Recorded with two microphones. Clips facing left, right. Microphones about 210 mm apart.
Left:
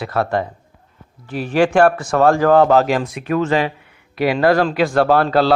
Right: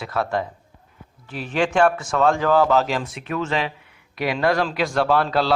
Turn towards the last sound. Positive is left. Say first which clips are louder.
# left 5 dB
turn(degrees=55)  # may be behind; listen again after turning